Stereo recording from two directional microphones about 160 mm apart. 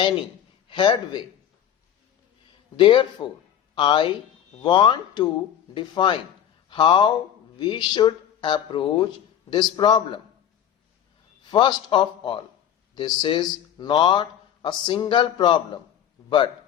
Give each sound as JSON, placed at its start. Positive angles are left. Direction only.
{"t": 0.7, "sound": "speech", "side_deg": 30}
{"t": 2.7, "sound": "speech", "side_deg": 30}
{"t": 11.5, "sound": "speech", "side_deg": 30}